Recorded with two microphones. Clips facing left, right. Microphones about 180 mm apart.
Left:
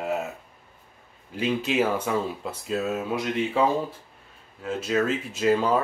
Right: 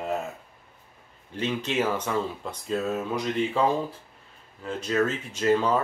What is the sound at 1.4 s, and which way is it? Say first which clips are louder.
Speech: left 3 dB; 10° left (ahead or behind).